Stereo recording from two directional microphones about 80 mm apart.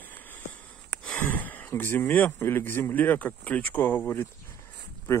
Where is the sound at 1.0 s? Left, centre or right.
Centre.